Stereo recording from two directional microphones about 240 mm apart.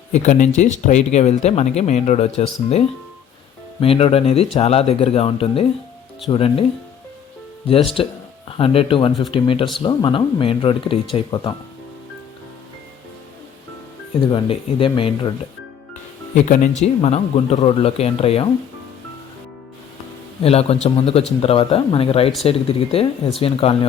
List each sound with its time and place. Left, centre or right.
0.1 s speech: left
7.7 s speech: left
14.2 s speech: left
16.8 s speech: left
20.4 s speech: left